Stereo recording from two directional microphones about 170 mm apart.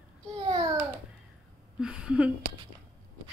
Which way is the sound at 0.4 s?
25° right (ahead or behind).